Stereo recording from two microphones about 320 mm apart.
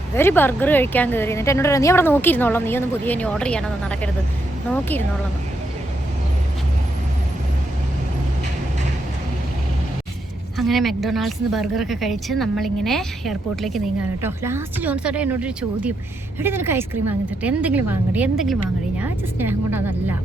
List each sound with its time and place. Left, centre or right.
0.2 s a woman's voice: centre
10.6 s a woman's voice: centre